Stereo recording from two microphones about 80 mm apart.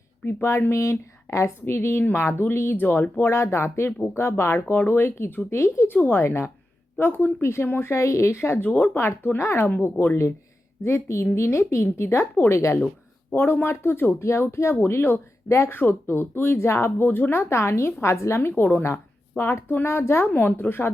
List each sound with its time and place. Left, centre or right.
0.4 s speech: left
3.3 s speech: left
8.7 s speech: centre
9.0 s speech: left
10.8 s speech: left